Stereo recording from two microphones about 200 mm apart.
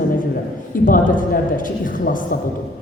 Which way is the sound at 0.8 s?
40° left (ahead or behind).